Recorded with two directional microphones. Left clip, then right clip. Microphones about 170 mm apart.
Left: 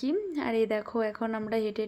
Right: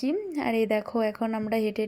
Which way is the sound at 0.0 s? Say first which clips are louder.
Right 2 dB; 15° right (ahead or behind).